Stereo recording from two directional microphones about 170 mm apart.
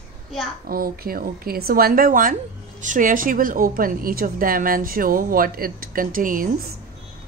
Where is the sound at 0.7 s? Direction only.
60° right (ahead or behind).